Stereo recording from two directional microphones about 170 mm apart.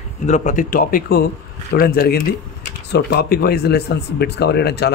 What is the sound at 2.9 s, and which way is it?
A man's voice, 80° left.